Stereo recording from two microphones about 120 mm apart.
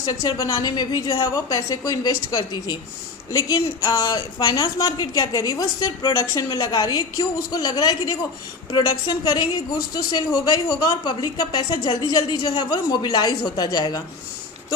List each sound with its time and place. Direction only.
0.0 s a woman's voice: 30° left (ahead or behind)